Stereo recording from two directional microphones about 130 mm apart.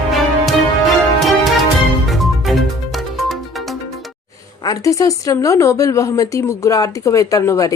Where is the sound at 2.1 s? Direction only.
Centre (ahead or behind).